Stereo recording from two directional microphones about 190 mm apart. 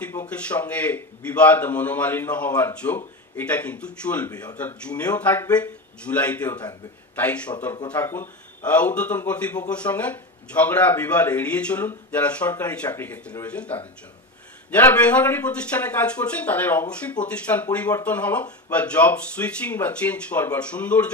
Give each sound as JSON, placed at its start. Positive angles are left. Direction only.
{"t": 0.0, "sound": "speech", "side_deg": 10}
{"t": 4.3, "sound": "speech", "side_deg": 20}
{"t": 4.6, "sound": "speech", "side_deg": 10}